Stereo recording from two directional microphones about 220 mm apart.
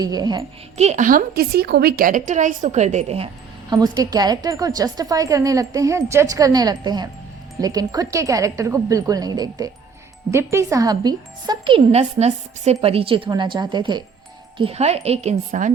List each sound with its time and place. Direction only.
0.0 s speech: 20° right (ahead or behind)
0.8 s a woman's voice: 30° right (ahead or behind)
3.7 s speech: 20° right (ahead or behind)